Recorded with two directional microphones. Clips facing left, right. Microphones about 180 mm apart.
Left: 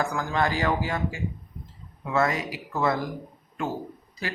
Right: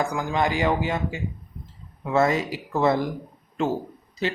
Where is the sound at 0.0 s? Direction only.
15° right (ahead or behind).